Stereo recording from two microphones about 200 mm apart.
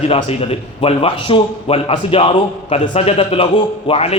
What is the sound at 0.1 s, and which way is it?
A man's voice, 30° left (ahead or behind).